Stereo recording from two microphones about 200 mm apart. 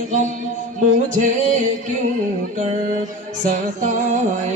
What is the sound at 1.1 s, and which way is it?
Music, 40° right (ahead or behind).